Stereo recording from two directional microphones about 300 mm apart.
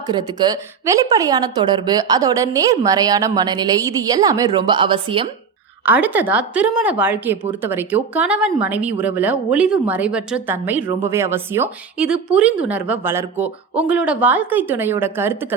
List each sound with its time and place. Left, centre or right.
0.1 s a woman's voice: centre
5.8 s a woman's voice: centre